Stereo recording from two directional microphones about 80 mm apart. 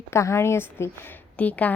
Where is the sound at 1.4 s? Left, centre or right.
Centre.